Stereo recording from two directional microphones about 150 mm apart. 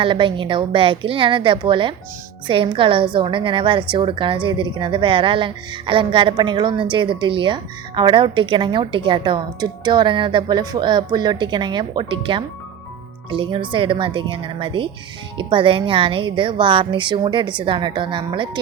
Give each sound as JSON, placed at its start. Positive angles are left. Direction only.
{"t": 0.0, "sound": "a woman's voice", "side_deg": -35}